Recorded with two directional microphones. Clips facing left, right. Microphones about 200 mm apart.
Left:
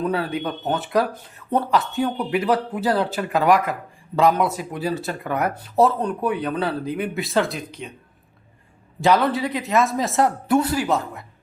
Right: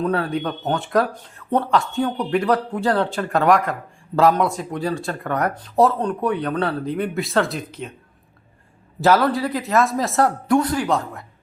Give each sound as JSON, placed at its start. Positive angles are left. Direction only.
{"t": 0.0, "sound": "speech", "side_deg": 5}
{"t": 9.0, "sound": "speech", "side_deg": -5}